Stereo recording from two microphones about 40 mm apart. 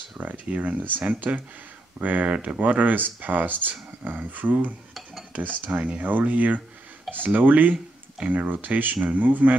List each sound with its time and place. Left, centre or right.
0.2 s speech: right